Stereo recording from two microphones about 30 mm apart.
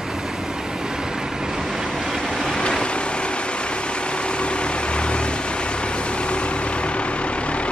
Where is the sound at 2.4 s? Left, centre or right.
Left.